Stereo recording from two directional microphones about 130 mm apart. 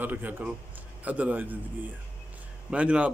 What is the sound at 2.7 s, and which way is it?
Speech, 10° right (ahead or behind).